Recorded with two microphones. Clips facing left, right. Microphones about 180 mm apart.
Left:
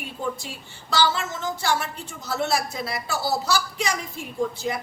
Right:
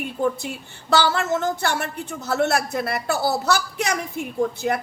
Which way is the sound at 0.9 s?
60° right (ahead or behind).